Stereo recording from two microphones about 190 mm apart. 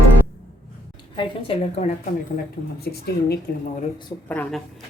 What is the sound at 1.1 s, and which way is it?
Speech, 25° left (ahead or behind).